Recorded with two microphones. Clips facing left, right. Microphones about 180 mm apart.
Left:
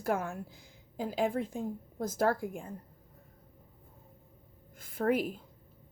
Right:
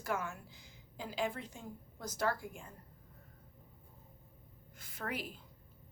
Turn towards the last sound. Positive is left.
turn(degrees=50)  # may be behind; listen again after turning